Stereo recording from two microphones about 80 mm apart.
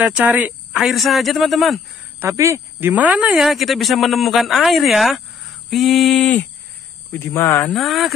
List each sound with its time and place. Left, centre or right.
0.0 s speech: centre
0.8 s speech: centre
2.1 s speech: right
2.8 s speech: right
3.3 s speech: centre
7.1 s speech: left
7.7 s speech: centre